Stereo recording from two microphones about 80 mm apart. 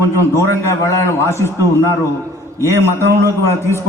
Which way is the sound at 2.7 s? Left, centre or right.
Left.